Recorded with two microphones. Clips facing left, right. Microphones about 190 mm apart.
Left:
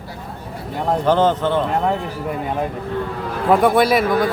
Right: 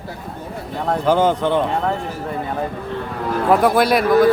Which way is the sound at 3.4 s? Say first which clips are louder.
Left 1 dB; centre (ahead or behind).